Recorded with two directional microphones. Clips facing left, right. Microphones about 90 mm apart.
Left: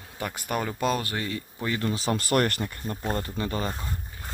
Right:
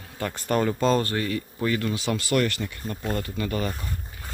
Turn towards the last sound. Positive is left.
turn(degrees=30)  # may be behind; listen again after turning